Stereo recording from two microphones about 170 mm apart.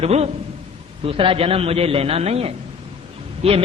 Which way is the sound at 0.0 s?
40° right (ahead or behind).